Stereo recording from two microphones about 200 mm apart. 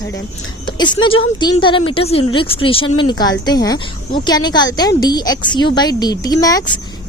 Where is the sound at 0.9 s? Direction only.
25° left (ahead or behind).